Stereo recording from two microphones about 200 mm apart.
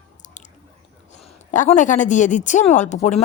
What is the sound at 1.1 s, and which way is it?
A woman's voice, 35° left (ahead or behind).